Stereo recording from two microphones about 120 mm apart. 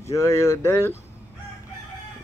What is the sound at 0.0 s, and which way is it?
Speech, 25° left (ahead or behind).